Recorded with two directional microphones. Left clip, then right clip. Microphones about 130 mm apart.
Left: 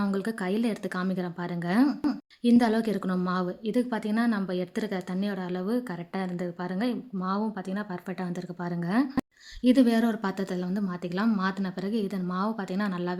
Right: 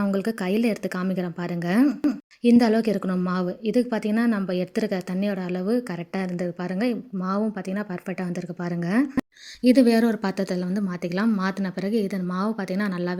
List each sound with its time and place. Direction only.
0.0 s speech: 25° right (ahead or behind)